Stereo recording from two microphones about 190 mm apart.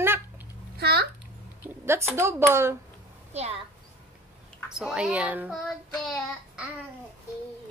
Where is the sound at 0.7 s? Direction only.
55° right (ahead or behind).